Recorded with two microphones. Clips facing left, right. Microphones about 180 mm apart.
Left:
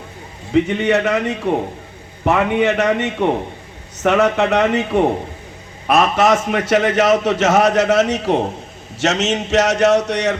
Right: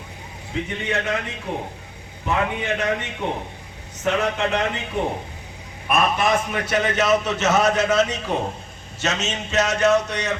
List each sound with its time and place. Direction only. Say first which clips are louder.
0.5 s a man's voice: left 11 dB; 70° left (ahead or behind)